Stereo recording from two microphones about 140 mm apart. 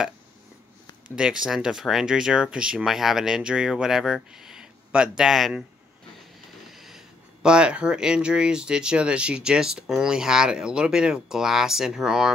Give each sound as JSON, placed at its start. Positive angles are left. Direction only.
{"t": 1.1, "sound": "speech", "side_deg": -5}
{"t": 6.7, "sound": "a sound", "side_deg": 0}
{"t": 7.4, "sound": "speech", "side_deg": -5}